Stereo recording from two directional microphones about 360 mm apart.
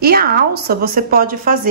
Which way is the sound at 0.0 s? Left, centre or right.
Right.